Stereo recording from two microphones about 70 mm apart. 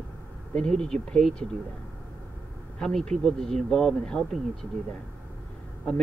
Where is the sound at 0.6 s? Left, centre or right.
Centre.